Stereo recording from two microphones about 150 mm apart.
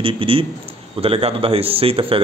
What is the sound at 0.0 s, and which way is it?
A man's voice, 35° right (ahead or behind).